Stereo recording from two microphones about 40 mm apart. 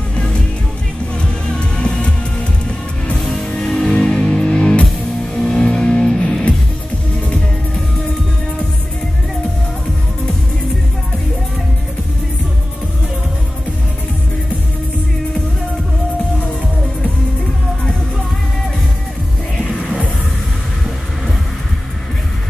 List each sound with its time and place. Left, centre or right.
0.1 s music: left
3.2 s music: centre; by 4.8 s left
5.3 s music: centre